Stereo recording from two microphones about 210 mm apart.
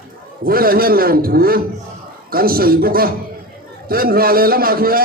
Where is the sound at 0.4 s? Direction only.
45° right (ahead or behind).